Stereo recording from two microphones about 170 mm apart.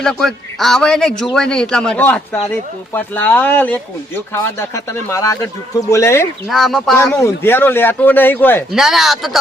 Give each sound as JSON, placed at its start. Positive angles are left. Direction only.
{"t": 0.0, "sound": "a man's voice", "side_deg": 5}
{"t": 6.5, "sound": "a man's voice", "side_deg": 0}
{"t": 6.9, "sound": "speech", "side_deg": 15}
{"t": 8.7, "sound": "a man's voice", "side_deg": 0}